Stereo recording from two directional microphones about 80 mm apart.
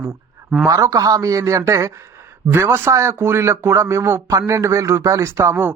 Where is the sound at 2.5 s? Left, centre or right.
Right.